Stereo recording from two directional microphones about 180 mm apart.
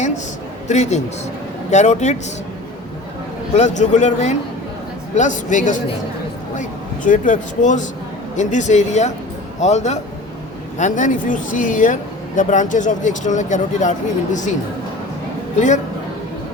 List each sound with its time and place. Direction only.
0.7 s a man's voice: 40° left (ahead or behind)
3.5 s a man's voice: 40° left (ahead or behind)
15.5 s speech: 40° left (ahead or behind)